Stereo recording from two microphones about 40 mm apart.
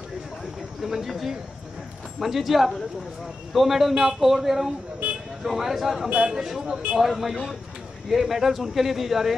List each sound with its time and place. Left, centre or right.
0.8 s speech: centre
3.9 s speech: centre
4.2 s speech: centre
5.0 s vehicle: right
5.4 s speech: centre
6.0 s a man's voice: right
6.3 s speech: centre